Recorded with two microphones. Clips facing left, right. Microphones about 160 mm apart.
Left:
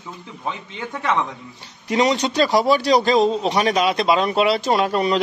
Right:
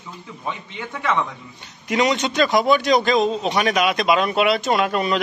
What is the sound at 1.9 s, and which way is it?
A man's voice, 30° left (ahead or behind).